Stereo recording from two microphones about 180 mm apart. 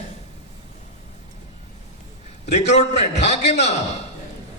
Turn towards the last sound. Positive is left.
turn(degrees=40)  # may be behind; listen again after turning